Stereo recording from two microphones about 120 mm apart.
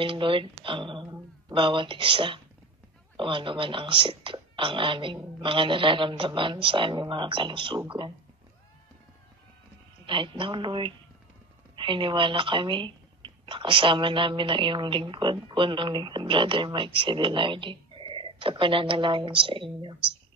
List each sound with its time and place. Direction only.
0.0 s speech: 45° right (ahead or behind)
10.0 s speech: 45° right (ahead or behind)